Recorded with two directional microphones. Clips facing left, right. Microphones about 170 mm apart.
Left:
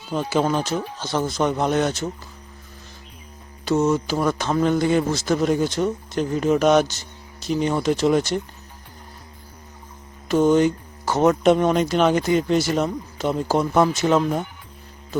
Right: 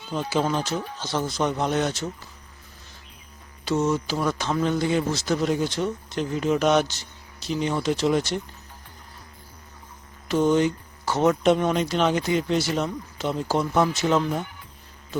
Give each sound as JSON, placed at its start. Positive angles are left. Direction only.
{"t": 0.1, "sound": "a man's voice", "side_deg": 55}
{"t": 3.7, "sound": "a man's voice", "side_deg": 50}
{"t": 10.2, "sound": "a man's voice", "side_deg": 50}